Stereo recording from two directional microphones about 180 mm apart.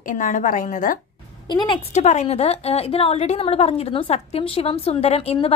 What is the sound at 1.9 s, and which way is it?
A woman's voice, 40° left (ahead or behind).